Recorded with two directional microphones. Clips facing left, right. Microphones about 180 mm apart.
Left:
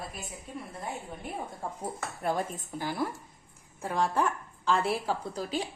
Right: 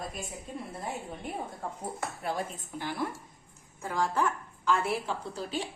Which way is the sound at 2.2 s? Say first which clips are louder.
Left 5 dB; 45° left (ahead or behind).